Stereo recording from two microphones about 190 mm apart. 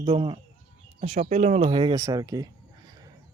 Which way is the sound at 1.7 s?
25° right (ahead or behind).